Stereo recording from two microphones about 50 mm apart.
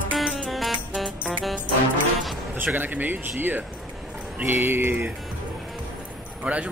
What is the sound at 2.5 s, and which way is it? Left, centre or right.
Speech, right.